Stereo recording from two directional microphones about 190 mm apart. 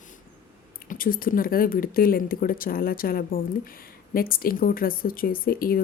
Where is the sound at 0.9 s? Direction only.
50° left (ahead or behind).